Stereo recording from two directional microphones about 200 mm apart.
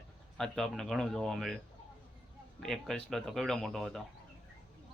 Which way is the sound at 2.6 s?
Centre (ahead or behind).